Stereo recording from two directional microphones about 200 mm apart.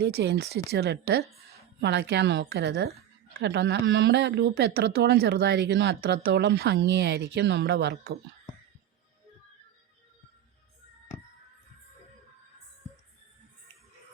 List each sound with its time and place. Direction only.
0.0 s speech: 55° right (ahead or behind)